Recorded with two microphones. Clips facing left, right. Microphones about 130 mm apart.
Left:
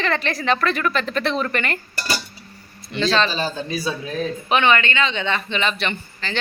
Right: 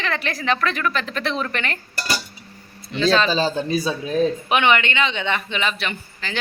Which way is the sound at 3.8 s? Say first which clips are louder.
Right 4 dB; 20° right (ahead or behind).